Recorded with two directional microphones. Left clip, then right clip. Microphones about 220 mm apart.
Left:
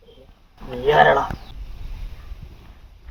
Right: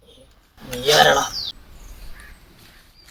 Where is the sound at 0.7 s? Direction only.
40° right (ahead or behind).